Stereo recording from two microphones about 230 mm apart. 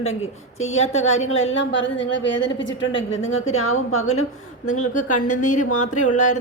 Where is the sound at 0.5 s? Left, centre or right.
Left.